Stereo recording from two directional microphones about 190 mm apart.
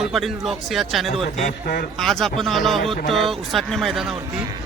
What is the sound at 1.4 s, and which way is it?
Speech, 50° left (ahead or behind).